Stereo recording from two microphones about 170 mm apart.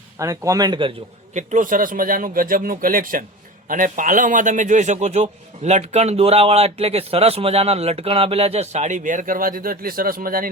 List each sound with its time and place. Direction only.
0.2 s speech: 20° right (ahead or behind)
1.3 s a man's voice: 45° right (ahead or behind)